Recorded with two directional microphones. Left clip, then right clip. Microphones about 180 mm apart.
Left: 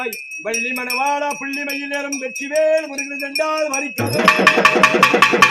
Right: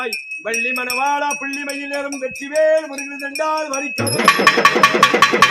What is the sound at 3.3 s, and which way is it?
Music, 25° left (ahead or behind).